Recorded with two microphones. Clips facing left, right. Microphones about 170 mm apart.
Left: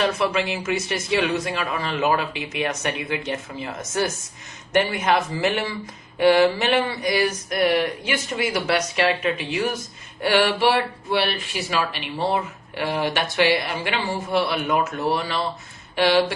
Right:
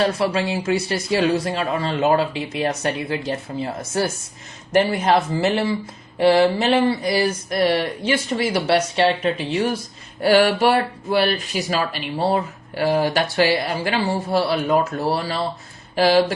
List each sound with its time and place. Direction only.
0.0 s speech: 30° right (ahead or behind)